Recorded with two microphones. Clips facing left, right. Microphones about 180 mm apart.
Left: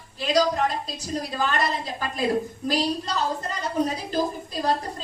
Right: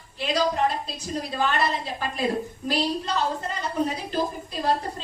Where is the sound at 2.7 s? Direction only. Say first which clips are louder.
Even; 40° left (ahead or behind).